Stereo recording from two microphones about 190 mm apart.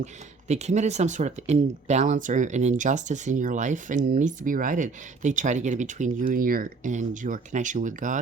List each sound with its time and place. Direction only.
0.0 s speech: 35° right (ahead or behind)